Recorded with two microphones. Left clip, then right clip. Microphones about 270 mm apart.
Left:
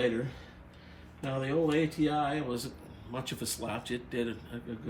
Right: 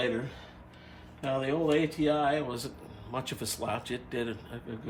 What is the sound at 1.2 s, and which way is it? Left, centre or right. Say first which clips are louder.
Speech: right 1 dB; centre.